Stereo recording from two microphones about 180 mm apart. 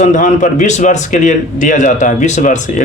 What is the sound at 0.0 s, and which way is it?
A man's voice, 45° left (ahead or behind).